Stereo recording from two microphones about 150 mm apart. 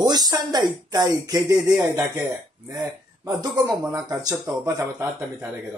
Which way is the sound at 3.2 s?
25° right (ahead or behind).